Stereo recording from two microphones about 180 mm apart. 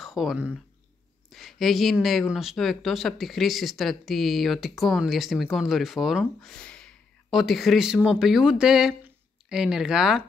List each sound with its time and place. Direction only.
0.0 s speech: centre (ahead or behind)